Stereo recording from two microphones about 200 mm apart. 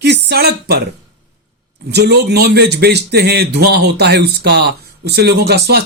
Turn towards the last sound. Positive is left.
turn(degrees=-55)  # may be behind; listen again after turning